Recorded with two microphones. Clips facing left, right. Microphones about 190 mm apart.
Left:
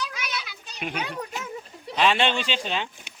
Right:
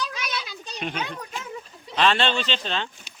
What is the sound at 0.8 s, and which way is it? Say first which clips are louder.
Speech: even; 10° left (ahead or behind).